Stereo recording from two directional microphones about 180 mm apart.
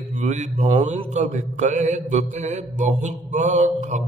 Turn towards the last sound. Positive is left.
turn(degrees=-40)  # may be behind; listen again after turning